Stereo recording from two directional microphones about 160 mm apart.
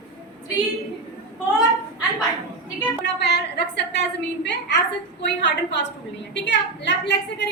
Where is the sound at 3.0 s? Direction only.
90° left.